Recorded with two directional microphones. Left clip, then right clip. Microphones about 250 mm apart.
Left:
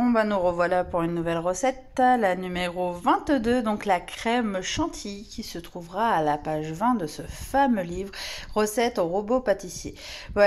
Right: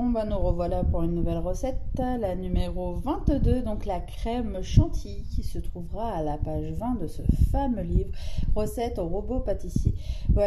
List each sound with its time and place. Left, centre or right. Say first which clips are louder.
0.1 s a man's voice: left 6 dB; left
1.5 s speech: left 6 dB; centre
2.8 s a man's voice: left 9 dB; left
3.3 s speech: left 5 dB; centre
5.9 s speech: left 8 dB; centre
9.0 s a man's voice: left 7 dB; left
9.4 s speech: left 5 dB; centre